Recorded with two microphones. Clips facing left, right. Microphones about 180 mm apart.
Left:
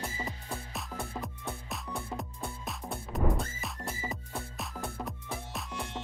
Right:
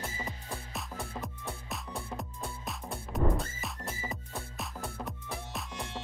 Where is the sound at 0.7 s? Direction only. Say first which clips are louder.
Left 1 dB; centre (ahead or behind).